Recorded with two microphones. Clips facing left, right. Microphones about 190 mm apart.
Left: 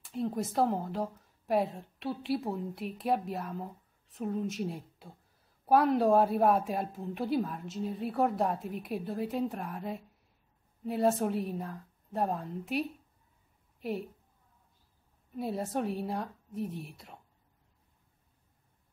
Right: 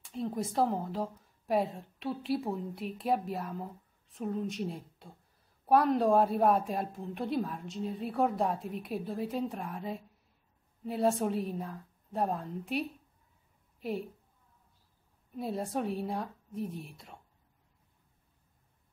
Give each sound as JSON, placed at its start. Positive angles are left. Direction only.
{"t": 0.0, "sound": "a woman's voice", "side_deg": 0}
{"t": 15.3, "sound": "speech", "side_deg": 0}